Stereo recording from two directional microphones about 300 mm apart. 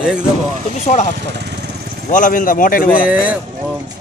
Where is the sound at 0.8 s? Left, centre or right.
Left.